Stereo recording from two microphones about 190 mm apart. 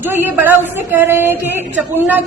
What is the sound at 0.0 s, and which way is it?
A woman's voice, 10° right (ahead or behind).